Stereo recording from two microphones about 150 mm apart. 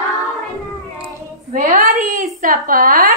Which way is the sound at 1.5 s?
65° right (ahead or behind).